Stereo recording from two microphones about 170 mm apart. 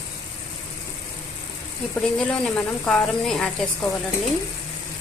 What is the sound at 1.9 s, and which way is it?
Speech, 5° left (ahead or behind).